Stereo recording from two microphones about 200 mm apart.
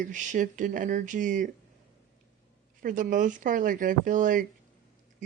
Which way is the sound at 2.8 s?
40° right (ahead or behind).